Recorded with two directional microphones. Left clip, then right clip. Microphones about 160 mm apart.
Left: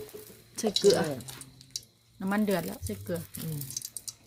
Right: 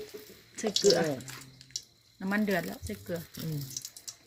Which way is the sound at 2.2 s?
10° left (ahead or behind).